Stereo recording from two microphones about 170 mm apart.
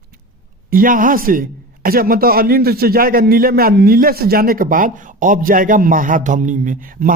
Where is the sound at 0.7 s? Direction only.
55° right (ahead or behind).